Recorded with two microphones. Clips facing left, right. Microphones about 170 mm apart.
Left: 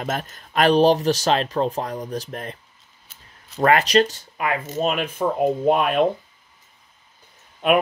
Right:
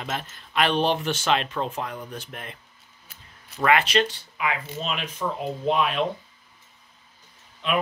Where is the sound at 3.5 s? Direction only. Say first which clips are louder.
Left 4 dB; 40° left (ahead or behind).